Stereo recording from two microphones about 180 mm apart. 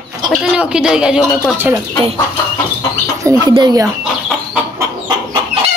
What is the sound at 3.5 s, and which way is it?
Speech, 20° right (ahead or behind).